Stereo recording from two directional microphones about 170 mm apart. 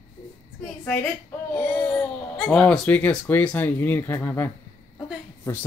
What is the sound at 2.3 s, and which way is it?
Speech, 5° left (ahead or behind).